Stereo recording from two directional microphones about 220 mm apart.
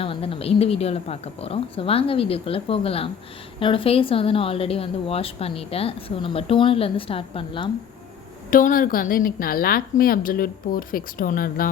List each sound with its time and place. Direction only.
0.0 s a woman's voice: 25° left (ahead or behind)
8.4 s a woman's voice: 40° left (ahead or behind)